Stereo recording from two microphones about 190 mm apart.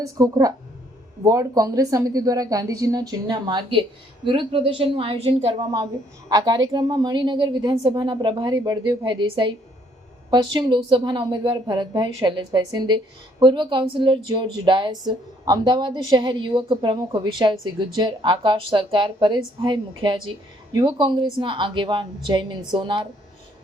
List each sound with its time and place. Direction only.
0.0 s a woman's voice: 20° right (ahead or behind)
5.7 s a woman's voice: 20° right (ahead or behind)